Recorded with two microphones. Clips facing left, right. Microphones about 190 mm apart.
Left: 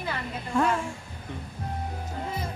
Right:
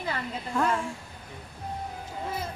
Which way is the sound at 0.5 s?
Centre (ahead or behind).